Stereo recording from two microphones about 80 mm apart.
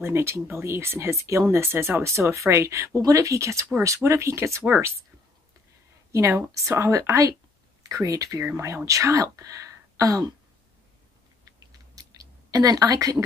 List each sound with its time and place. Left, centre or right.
0.0 s speech: right
6.1 s speech: right
11.9 s a sound: right